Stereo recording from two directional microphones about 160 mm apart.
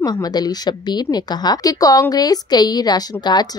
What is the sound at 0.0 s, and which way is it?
A woman's voice, 25° left (ahead or behind).